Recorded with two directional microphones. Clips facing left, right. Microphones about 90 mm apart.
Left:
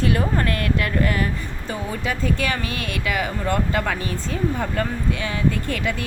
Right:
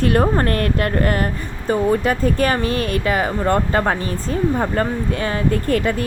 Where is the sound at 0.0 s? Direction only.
50° right (ahead or behind).